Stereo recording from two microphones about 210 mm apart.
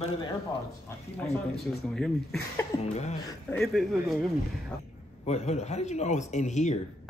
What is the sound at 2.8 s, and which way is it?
Speech, 30° left (ahead or behind).